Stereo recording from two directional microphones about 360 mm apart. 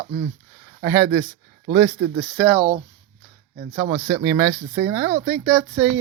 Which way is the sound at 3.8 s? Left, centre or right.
Centre.